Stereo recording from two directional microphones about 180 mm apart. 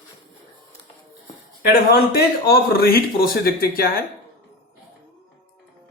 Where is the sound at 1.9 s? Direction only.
60° left (ahead or behind).